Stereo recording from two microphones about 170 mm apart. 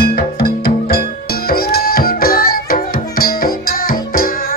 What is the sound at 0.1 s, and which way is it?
Music, 65° left (ahead or behind).